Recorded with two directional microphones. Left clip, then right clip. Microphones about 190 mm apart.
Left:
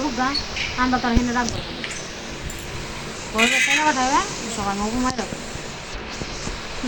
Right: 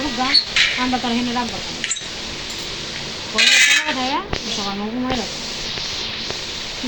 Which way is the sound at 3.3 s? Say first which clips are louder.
Right 5 dB; 45° right (ahead or behind).